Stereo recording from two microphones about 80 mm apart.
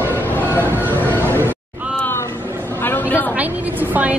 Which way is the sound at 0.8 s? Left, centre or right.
Left.